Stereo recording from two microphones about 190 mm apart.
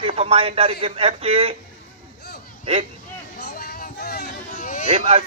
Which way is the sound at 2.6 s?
30° right (ahead or behind).